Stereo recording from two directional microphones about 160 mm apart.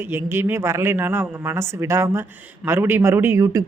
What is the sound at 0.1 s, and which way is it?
Speech, 15° right (ahead or behind).